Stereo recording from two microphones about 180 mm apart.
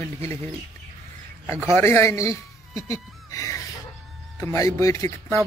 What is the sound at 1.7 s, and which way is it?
Speech, 15° left (ahead or behind).